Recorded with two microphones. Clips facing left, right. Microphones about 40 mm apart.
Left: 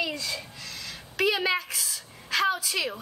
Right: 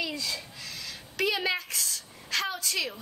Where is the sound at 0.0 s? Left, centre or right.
Centre.